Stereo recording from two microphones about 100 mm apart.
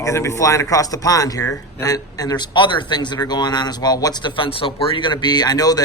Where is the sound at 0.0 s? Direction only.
30° left (ahead or behind).